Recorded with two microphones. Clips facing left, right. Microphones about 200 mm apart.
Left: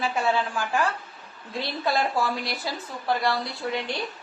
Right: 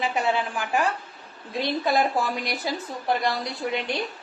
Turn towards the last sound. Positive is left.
turn(degrees=-20)  # may be behind; listen again after turning